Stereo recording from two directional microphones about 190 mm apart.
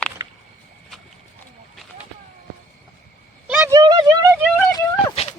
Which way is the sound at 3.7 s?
20° right (ahead or behind).